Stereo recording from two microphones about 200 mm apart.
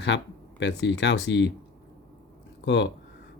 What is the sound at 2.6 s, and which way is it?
Speech, 60° left (ahead or behind).